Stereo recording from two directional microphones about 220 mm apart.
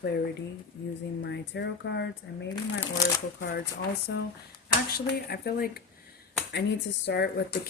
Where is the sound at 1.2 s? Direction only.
50° left (ahead or behind).